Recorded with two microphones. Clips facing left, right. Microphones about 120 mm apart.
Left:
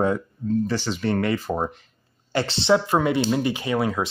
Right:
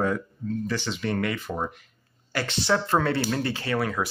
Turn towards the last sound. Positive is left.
turn(degrees=20)  # may be behind; listen again after turning